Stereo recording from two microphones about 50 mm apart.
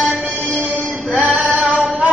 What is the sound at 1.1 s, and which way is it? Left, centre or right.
Female singing, right.